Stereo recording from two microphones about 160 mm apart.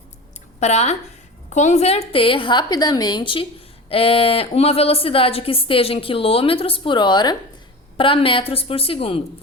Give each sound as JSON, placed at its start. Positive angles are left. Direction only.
{"t": 0.6, "sound": "a woman's voice", "side_deg": 45}